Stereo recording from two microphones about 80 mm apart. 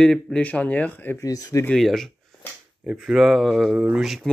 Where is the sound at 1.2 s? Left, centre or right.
Left.